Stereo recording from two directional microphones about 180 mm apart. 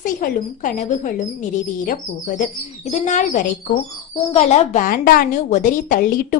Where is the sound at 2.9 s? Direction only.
40° left (ahead or behind).